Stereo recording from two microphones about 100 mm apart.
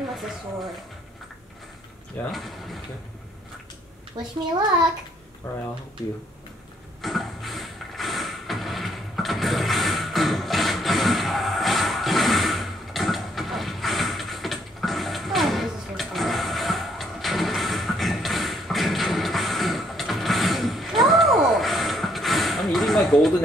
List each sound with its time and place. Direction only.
2.3 s speech: centre (ahead or behind)
4.2 s a child's voice: 45° right (ahead or behind)
5.4 s speech: 20° left (ahead or behind)
7.0 s vehicle: centre (ahead or behind)